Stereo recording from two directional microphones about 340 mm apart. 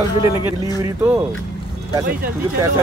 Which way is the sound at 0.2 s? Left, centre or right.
Centre.